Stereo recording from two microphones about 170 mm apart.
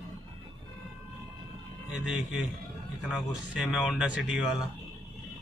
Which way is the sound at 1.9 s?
5° right (ahead or behind).